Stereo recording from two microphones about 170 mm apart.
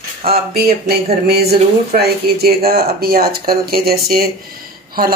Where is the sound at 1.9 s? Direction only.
65° right (ahead or behind).